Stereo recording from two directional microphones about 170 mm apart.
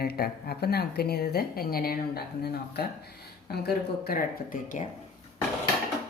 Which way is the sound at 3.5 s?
65° left (ahead or behind).